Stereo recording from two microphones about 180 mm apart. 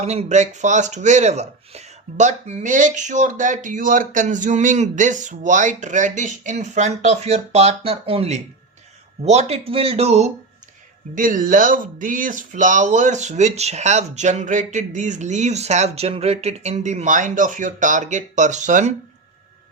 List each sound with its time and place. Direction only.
0.0 s speech: 35° right (ahead or behind)
11.1 s speech: 50° right (ahead or behind)